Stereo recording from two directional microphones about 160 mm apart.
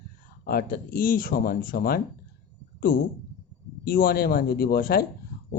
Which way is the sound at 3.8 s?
65° left (ahead or behind).